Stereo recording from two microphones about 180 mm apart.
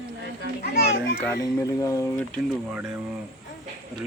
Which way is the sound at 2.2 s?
5° left (ahead or behind).